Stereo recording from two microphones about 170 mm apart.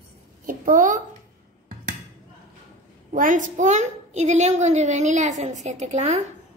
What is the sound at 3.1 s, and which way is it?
A child's voice, 50° right (ahead or behind).